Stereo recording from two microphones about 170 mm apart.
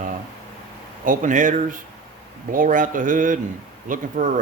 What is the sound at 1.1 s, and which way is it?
A man's voice, 50° right (ahead or behind).